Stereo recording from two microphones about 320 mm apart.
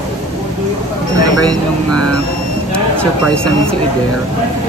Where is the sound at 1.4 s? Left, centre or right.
Right.